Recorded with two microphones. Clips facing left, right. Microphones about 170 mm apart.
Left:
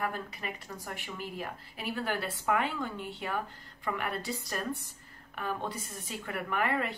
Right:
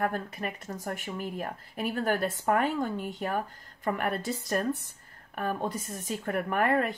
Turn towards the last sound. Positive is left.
turn(degrees=-45)  # may be behind; listen again after turning